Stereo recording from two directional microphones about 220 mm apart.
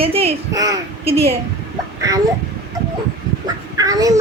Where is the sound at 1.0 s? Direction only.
30° right (ahead or behind).